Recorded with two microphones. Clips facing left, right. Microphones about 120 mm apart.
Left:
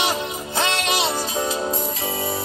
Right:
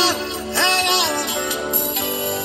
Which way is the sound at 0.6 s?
25° right (ahead or behind).